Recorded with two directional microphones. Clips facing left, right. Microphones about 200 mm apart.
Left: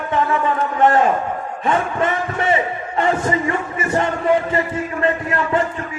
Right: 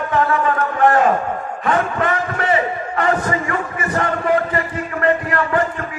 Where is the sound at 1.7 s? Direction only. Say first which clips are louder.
Right 1 dB; 25° left (ahead or behind).